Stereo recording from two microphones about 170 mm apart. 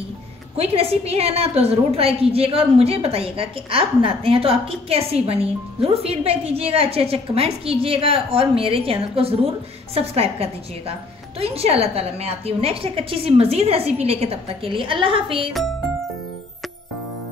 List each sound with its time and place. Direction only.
0.6 s a woman's voice: 35° right (ahead or behind)